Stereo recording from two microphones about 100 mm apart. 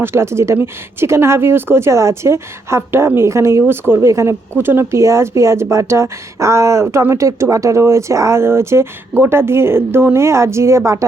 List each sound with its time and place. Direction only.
0.0 s speech: 25° right (ahead or behind)